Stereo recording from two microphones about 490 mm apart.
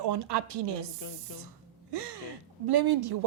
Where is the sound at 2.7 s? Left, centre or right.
Right.